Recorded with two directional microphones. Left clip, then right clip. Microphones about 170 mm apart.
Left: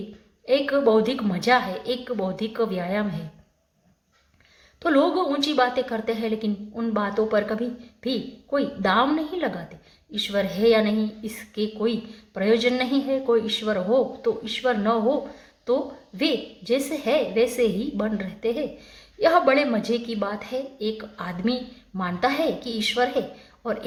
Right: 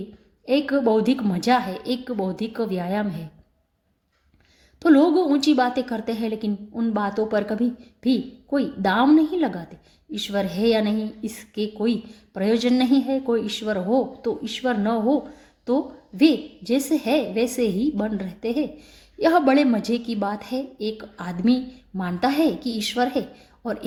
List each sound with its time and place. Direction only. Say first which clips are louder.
0.4 s a woman's voice: left 1 dB; 40° right (ahead or behind)
4.8 s a woman's voice: right 3 dB; 40° right (ahead or behind)